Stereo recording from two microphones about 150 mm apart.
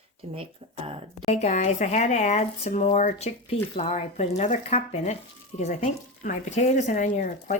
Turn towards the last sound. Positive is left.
turn(degrees=60)  # may be behind; listen again after turning